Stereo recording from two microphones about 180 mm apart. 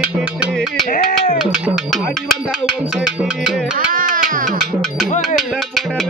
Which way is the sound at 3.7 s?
50° right (ahead or behind).